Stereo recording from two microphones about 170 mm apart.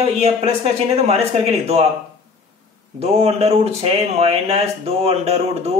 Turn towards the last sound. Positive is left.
turn(degrees=-40)  # may be behind; listen again after turning